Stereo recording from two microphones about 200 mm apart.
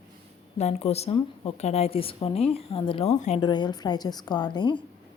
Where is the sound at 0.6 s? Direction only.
35° left (ahead or behind).